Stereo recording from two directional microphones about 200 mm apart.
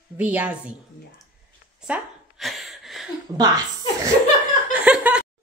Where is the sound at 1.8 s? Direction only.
Centre (ahead or behind).